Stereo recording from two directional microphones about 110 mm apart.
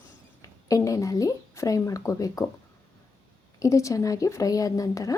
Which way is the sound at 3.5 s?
30° left (ahead or behind).